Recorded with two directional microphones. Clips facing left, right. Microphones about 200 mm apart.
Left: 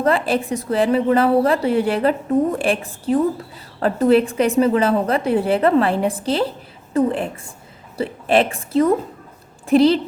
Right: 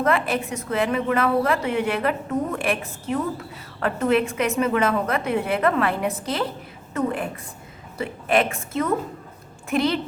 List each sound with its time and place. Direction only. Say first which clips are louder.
0.0 s a woman's voice: left 4 dB; 30° left (ahead or behind)